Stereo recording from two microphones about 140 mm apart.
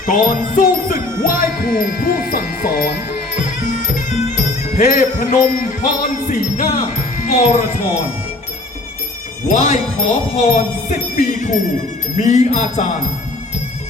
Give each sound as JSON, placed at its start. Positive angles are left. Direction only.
{"t": 0.0, "sound": "music", "side_deg": 75}
{"t": 3.6, "sound": "music", "side_deg": 65}
{"t": 4.9, "sound": "jingle bell", "side_deg": 60}
{"t": 9.5, "sound": "music", "side_deg": 50}
{"t": 10.3, "sound": "jingle bell", "side_deg": 55}
{"t": 12.1, "sound": "music", "side_deg": 55}